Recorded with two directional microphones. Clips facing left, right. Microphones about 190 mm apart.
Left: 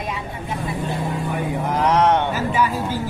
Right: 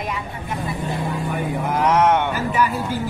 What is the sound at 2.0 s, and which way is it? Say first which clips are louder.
Speech: even; 30° left (ahead or behind).